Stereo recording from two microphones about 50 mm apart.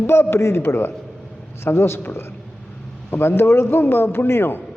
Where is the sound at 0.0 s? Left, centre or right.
Left.